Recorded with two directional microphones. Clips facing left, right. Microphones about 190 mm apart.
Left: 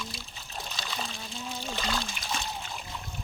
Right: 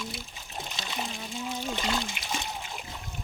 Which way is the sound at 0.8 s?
20° right (ahead or behind).